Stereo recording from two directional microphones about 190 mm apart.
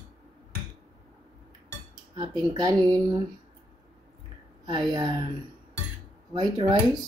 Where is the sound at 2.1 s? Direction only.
20° right (ahead or behind).